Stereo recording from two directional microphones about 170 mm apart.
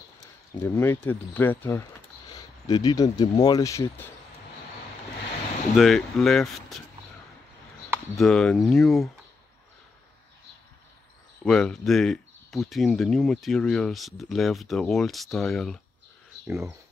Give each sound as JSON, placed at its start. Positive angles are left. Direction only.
{"t": 0.6, "sound": "speech", "side_deg": 10}
{"t": 2.6, "sound": "speech", "side_deg": 25}
{"t": 5.8, "sound": "speech", "side_deg": 0}
{"t": 8.2, "sound": "speech", "side_deg": 5}
{"t": 11.4, "sound": "speech", "side_deg": 5}
{"t": 16.4, "sound": "speech", "side_deg": -15}